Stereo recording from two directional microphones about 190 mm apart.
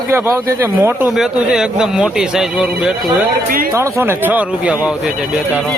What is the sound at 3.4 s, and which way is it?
Speech, 50° right (ahead or behind).